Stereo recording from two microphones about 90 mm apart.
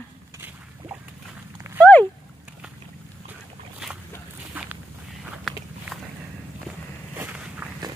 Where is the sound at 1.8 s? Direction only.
15° left (ahead or behind).